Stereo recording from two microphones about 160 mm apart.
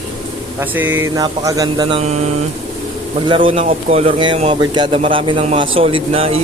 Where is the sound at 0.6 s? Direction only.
10° right (ahead or behind).